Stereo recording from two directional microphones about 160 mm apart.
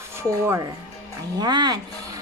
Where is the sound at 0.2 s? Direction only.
15° right (ahead or behind).